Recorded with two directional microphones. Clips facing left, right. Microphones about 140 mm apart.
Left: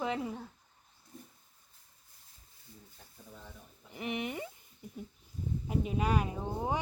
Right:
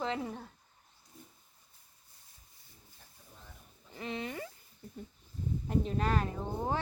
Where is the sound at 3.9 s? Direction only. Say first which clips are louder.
Left 2 dB; 20° left (ahead or behind).